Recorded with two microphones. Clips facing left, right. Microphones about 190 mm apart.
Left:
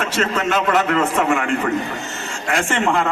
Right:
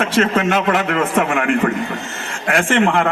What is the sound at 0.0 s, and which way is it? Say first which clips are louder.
A man's voice: right 4 dB; 50° right (ahead or behind).